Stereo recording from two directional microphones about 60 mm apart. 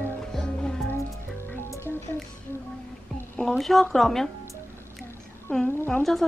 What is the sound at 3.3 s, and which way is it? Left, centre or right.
Speech, centre.